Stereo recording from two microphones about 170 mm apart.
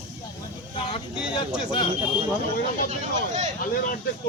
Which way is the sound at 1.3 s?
30° left (ahead or behind).